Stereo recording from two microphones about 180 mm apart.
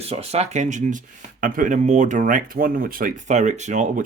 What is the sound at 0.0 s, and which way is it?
Speech, 35° right (ahead or behind).